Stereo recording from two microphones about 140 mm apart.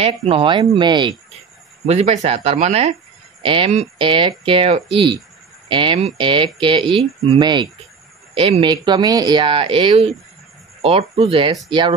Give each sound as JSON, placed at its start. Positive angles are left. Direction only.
{"t": 0.0, "sound": "speech", "side_deg": -45}
{"t": 1.9, "sound": "speech", "side_deg": -50}
{"t": 3.4, "sound": "speech", "side_deg": -35}